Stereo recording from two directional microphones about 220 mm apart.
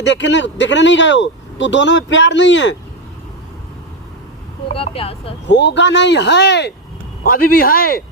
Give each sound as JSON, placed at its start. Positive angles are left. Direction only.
{"t": 0.0, "sound": "speech", "side_deg": 55}
{"t": 4.7, "sound": "speech", "side_deg": 25}
{"t": 5.5, "sound": "speech", "side_deg": 55}